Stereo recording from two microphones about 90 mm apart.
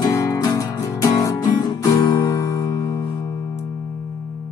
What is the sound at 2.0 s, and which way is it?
Guitar, 50° left (ahead or behind).